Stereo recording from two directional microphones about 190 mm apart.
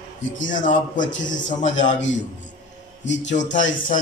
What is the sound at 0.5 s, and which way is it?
A man's voice, 45° left (ahead or behind).